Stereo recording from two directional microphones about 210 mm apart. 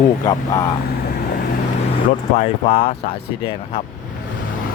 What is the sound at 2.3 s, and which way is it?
Speech, 30° left (ahead or behind).